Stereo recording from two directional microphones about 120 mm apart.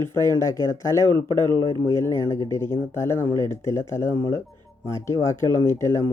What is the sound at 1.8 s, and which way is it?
Speech, 25° left (ahead or behind).